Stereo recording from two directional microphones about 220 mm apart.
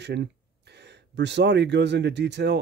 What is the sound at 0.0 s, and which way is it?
Speech, 50° right (ahead or behind).